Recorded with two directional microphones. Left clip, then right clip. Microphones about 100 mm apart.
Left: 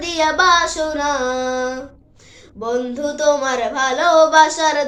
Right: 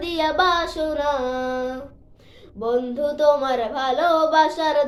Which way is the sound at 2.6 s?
35° right (ahead or behind).